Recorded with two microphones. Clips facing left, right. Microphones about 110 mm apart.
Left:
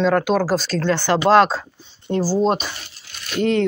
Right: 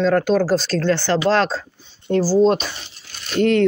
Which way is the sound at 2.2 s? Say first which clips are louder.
Right 4 dB; 20° left (ahead or behind).